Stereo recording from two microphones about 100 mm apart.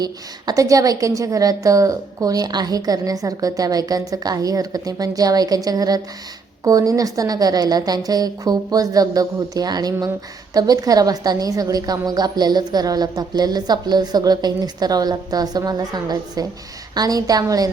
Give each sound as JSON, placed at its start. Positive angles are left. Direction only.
{"t": 0.0, "sound": "a woman's voice", "side_deg": -40}